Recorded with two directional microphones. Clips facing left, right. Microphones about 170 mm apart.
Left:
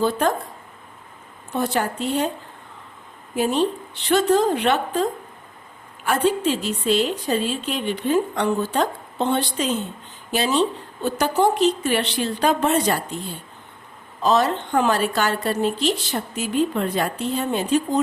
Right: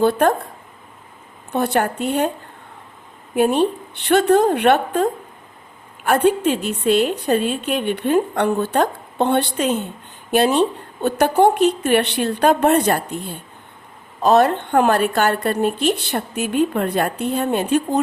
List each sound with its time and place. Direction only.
0.0 s a woman's voice: 60° right (ahead or behind)
1.5 s a woman's voice: 60° right (ahead or behind)
3.3 s a woman's voice: 60° right (ahead or behind)
6.1 s a woman's voice: 60° right (ahead or behind)